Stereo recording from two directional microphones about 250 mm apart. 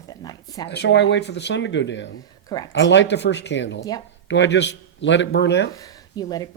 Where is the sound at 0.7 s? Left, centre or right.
Left.